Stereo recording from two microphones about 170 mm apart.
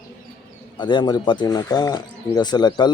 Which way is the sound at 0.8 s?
25° left (ahead or behind).